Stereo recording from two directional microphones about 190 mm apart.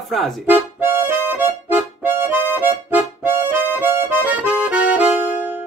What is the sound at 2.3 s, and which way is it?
Music, 10° right (ahead or behind).